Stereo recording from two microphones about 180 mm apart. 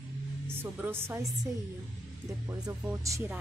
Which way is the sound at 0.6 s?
10° right (ahead or behind).